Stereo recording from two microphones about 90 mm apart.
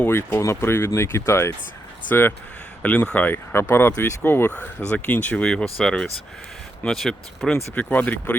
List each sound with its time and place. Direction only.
0.0 s speech: 25° left (ahead or behind)